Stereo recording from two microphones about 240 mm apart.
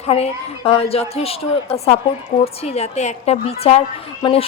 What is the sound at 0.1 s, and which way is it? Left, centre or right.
A woman's voice, left.